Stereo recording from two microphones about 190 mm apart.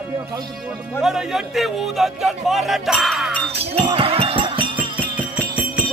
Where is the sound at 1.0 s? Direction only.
Centre (ahead or behind).